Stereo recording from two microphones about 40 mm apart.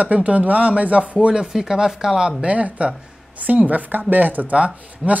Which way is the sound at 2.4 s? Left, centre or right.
Right.